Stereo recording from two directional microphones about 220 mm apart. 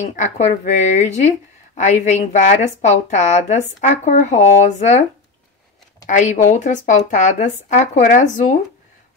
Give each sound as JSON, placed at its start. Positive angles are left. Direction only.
{"t": 0.0, "sound": "a woman's voice", "side_deg": 35}
{"t": 6.0, "sound": "a woman's voice", "side_deg": 35}